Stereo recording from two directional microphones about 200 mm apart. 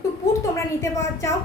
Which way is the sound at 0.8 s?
15° left (ahead or behind).